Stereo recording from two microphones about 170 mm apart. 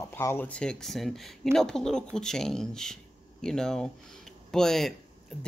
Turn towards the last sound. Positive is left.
turn(degrees=0)  # may be behind; listen again after turning